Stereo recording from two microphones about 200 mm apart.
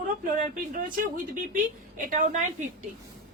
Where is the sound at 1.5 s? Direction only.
40° right (ahead or behind).